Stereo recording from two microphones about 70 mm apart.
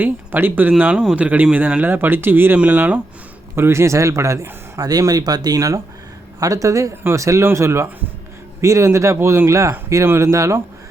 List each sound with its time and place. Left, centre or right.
0.0 s speech: right
3.5 s speech: right
4.8 s speech: right